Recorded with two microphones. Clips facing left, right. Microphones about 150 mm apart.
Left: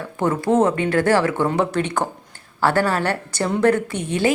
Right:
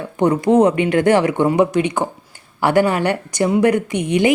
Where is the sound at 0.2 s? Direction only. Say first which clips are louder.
Right 4 dB; 20° right (ahead or behind).